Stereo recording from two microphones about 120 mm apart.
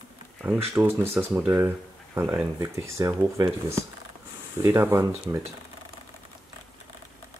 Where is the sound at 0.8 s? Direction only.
20° right (ahead or behind).